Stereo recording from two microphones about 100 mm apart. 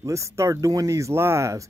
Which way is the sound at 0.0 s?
30° right (ahead or behind).